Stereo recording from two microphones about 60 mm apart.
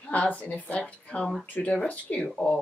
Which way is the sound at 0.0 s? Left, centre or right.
Left.